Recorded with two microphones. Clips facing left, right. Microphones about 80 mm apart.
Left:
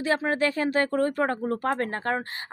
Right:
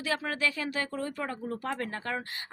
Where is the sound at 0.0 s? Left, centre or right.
Left.